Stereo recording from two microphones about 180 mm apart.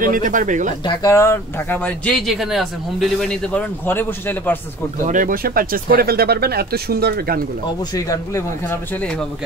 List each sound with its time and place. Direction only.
0.0 s speech: 50° right (ahead or behind)
0.8 s speech: 15° left (ahead or behind)
5.0 s speech: 45° right (ahead or behind)
7.9 s speech: 15° left (ahead or behind)